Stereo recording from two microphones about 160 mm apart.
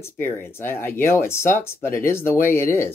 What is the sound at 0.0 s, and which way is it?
Speech, 15° left (ahead or behind).